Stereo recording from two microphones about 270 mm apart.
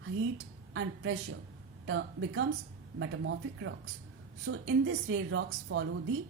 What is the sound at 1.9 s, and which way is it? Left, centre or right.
Speech, right.